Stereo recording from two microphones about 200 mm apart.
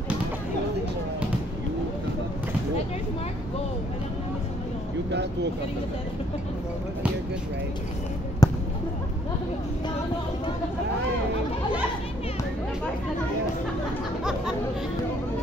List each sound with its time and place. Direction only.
5.1 s speech: 60° right (ahead or behind)
8.4 s basketball bounce: 20° left (ahead or behind)